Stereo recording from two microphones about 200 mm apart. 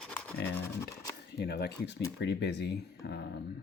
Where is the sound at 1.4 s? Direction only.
55° left (ahead or behind).